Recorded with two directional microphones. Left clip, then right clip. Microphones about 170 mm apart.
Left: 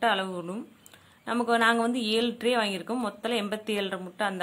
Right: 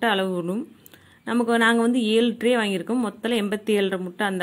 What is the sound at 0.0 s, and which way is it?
Speech, 25° right (ahead or behind).